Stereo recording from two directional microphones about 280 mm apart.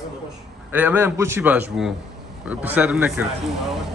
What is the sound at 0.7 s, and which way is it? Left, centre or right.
A man's voice, centre.